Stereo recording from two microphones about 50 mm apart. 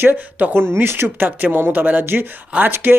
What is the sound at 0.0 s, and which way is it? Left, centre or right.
Speech, right.